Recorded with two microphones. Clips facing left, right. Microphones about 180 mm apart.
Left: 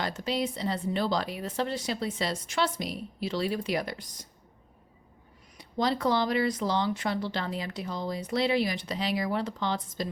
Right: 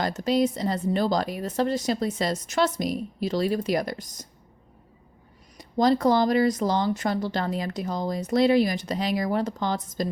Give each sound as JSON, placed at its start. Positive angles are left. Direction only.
{"t": 0.0, "sound": "speech", "side_deg": -45}
{"t": 5.5, "sound": "speech", "side_deg": -40}